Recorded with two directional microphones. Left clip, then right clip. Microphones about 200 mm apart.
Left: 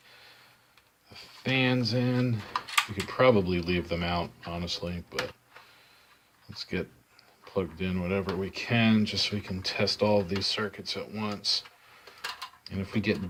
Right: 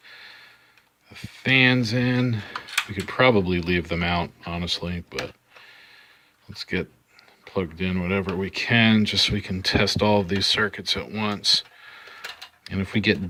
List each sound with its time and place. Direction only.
1.1 s speech: 30° right (ahead or behind)
6.5 s speech: 35° right (ahead or behind)
12.6 s speech: 35° right (ahead or behind)